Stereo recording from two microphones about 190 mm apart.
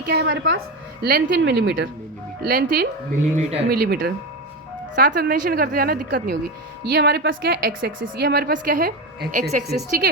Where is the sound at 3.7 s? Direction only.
55° right (ahead or behind).